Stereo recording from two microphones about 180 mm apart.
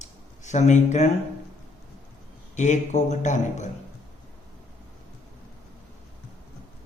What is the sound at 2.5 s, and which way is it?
Speech, 40° left (ahead or behind).